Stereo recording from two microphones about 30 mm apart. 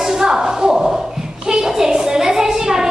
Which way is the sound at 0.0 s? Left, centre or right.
Centre.